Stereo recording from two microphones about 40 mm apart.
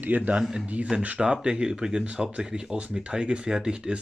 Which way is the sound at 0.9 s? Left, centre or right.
Right.